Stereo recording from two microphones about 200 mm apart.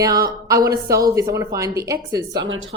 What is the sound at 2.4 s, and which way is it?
Speech, 75° right (ahead or behind).